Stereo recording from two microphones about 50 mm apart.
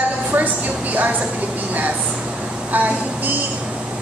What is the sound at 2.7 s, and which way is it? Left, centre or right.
Speech, right.